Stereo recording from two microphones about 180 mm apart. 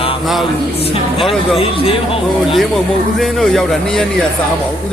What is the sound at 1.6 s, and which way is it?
Speech, 30° left (ahead or behind).